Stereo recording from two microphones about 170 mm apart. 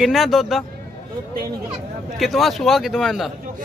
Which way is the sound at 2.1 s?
Centre (ahead or behind).